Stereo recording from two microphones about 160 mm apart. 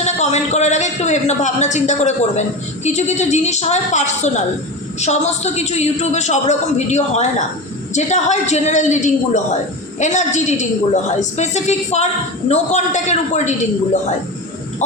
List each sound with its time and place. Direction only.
0.0 s a man's voice: 45° left (ahead or behind)